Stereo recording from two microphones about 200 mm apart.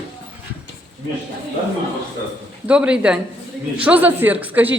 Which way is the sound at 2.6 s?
5° right (ahead or behind).